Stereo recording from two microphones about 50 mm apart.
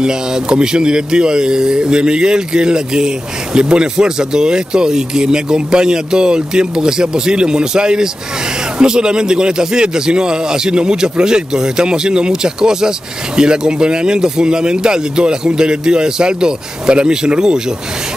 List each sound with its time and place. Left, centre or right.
0.0 s speech: centre